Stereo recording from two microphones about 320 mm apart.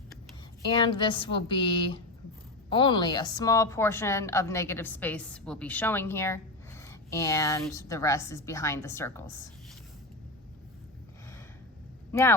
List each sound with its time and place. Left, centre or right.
0.7 s a woman's voice: centre